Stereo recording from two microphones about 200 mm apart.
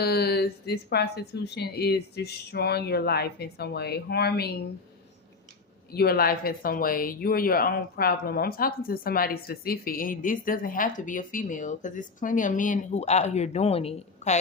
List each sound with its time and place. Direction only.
0.0 s a woman's voice: 55° left (ahead or behind)
5.9 s a woman's voice: 50° left (ahead or behind); by 14.3 s 30° left (ahead or behind)